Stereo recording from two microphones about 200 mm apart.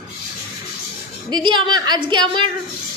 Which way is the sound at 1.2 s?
25° right (ahead or behind).